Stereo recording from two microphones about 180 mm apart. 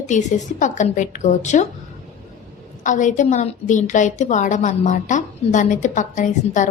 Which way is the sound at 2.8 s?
45° left (ahead or behind).